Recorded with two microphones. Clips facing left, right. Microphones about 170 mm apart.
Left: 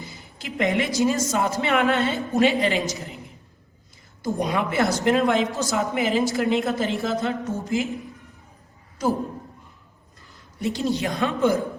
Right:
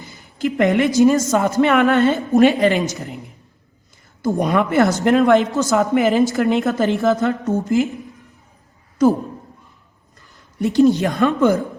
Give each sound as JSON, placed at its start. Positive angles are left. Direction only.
{"t": 0.0, "sound": "a woman's voice", "side_deg": -55}
{"t": 4.2, "sound": "a woman's voice", "side_deg": -50}
{"t": 10.6, "sound": "a woman's voice", "side_deg": -50}